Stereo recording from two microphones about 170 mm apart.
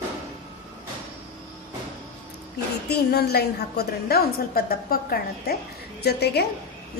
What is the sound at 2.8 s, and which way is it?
A woman's voice, 70° left (ahead or behind).